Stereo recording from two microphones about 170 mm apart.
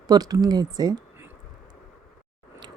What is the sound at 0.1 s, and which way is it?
Speech, 20° right (ahead or behind).